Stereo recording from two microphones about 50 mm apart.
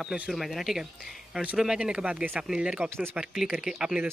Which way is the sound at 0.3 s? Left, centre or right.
Centre.